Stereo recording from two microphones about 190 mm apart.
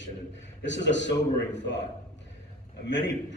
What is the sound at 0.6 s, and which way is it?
A man's voice, 70° left (ahead or behind).